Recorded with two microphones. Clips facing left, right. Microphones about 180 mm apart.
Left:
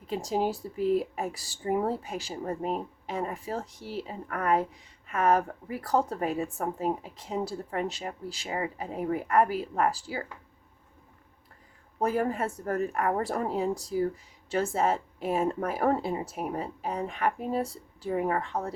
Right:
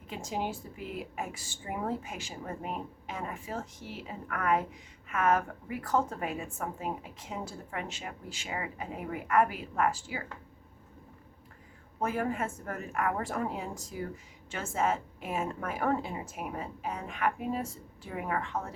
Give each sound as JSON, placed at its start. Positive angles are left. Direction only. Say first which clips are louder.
{"t": 0.1, "sound": "a woman's voice", "louder": "left 7 dB", "side_deg": 35}
{"t": 11.9, "sound": "a woman's voice", "louder": "left 4 dB", "side_deg": 35}